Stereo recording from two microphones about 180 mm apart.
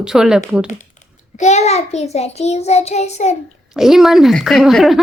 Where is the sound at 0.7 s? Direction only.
40° left (ahead or behind).